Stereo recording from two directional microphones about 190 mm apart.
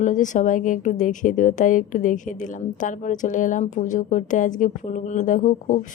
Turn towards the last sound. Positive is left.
turn(degrees=40)  # may be behind; listen again after turning